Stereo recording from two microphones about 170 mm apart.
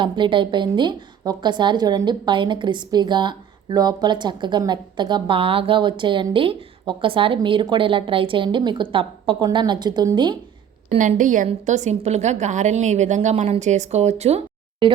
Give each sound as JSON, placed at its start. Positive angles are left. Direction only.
{"t": 0.0, "sound": "a woman's voice", "side_deg": -30}
{"t": 10.8, "sound": "a woman's voice", "side_deg": -50}